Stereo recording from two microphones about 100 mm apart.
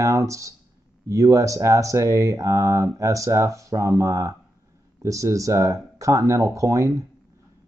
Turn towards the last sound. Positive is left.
turn(degrees=-30)  # may be behind; listen again after turning